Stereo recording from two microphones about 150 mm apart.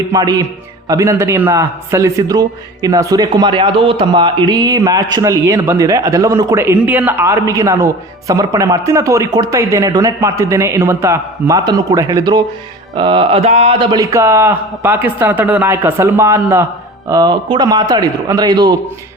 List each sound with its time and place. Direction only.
0.1 s a man's voice: 25° right (ahead or behind); by 13.7 s 45° right (ahead or behind)
13.7 s a man's voice: 25° right (ahead or behind)